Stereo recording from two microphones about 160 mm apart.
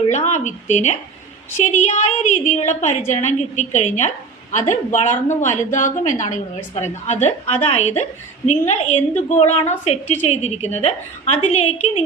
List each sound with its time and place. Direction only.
0.1 s a woman's voice: 45° left (ahead or behind)